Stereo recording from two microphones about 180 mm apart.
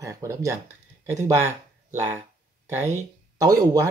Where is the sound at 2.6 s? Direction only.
15° right (ahead or behind).